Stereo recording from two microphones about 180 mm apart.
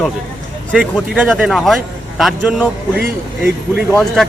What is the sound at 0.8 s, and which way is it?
Speech, 5° right (ahead or behind).